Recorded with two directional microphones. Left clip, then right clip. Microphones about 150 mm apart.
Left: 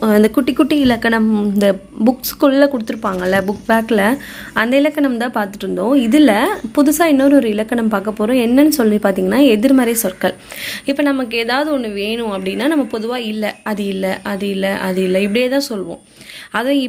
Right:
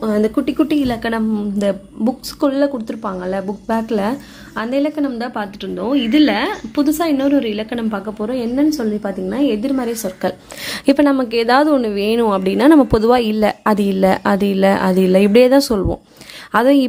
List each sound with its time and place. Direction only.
0.0 s a woman's voice: 10° left (ahead or behind)
6.9 s a woman's voice: centre (ahead or behind)
10.6 s a woman's voice: 45° right (ahead or behind)